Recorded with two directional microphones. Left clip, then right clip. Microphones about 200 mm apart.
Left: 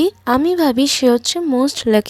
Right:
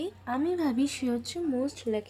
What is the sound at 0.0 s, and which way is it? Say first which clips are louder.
Speech: left 16 dB; 45° left (ahead or behind).